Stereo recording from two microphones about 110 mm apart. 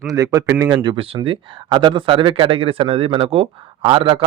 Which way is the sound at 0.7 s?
50° right (ahead or behind).